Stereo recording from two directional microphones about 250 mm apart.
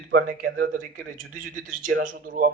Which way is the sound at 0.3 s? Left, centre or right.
Right.